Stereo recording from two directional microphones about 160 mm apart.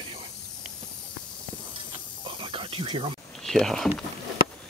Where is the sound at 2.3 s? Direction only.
35° right (ahead or behind).